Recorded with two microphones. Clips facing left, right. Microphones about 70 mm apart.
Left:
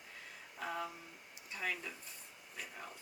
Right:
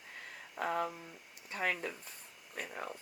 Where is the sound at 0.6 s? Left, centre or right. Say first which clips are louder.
Right 6 dB; right.